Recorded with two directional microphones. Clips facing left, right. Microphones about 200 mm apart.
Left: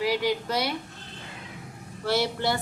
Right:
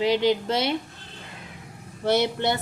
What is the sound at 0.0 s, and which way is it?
Speech, 25° right (ahead or behind).